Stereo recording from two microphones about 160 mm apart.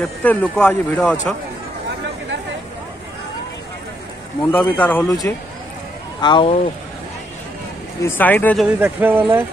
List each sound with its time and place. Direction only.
0.2 s speech: 10° left (ahead or behind)
4.5 s speech: 10° left (ahead or behind)
5.0 s speech: 20° left (ahead or behind)
8.0 s speech: 15° left (ahead or behind)
8.5 s speech: 5° right (ahead or behind)